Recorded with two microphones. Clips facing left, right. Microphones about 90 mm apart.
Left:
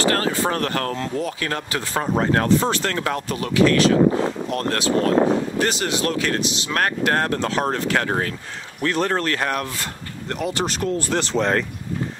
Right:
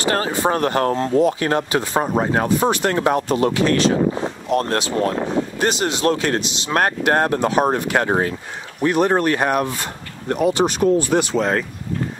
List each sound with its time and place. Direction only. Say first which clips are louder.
0.0 s speech: right 1 dB; 20° right (ahead or behind)
11.3 s speech: right 1 dB; 5° right (ahead or behind)